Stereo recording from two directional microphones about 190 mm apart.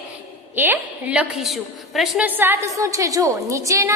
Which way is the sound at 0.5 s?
10° right (ahead or behind).